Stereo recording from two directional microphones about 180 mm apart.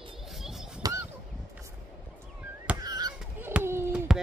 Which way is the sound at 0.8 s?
20° right (ahead or behind).